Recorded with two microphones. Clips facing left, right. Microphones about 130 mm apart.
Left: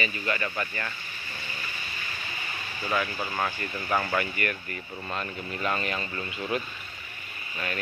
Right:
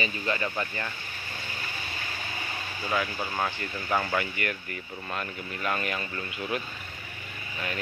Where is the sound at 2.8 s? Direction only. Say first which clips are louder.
Left 1 dB; centre (ahead or behind).